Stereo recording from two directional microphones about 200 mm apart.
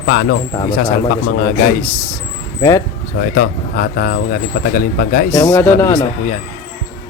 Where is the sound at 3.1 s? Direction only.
45° left (ahead or behind).